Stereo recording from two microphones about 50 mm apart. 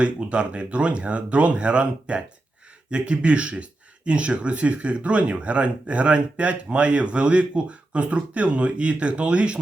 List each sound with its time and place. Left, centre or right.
0.0 s speech: right